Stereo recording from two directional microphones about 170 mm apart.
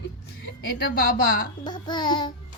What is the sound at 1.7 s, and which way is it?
Babbling, 25° left (ahead or behind).